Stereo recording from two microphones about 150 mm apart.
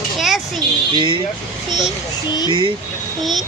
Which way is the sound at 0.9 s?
30° right (ahead or behind).